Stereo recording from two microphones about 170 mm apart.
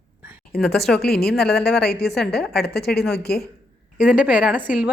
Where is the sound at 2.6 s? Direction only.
70° left (ahead or behind).